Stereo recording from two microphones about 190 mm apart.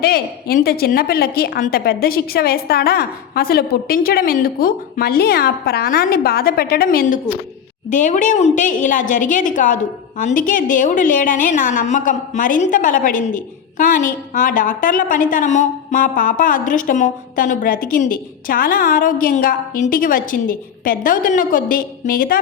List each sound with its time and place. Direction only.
0.0 s a woman's voice: 50° left (ahead or behind)